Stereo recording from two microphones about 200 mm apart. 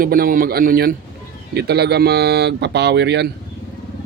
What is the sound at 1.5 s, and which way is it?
Speech, 55° right (ahead or behind).